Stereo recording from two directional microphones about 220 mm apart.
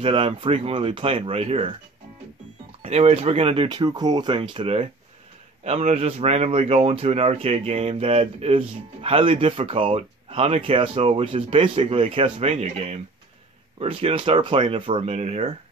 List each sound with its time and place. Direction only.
0.0 s speech: 25° right (ahead or behind)
2.8 s speech: 30° right (ahead or behind)